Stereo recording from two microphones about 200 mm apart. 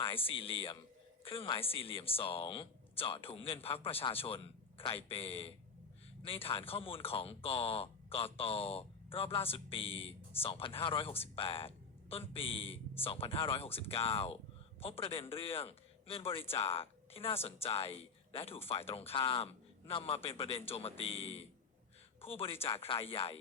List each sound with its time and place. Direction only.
0.0 s speech: 25° left (ahead or behind)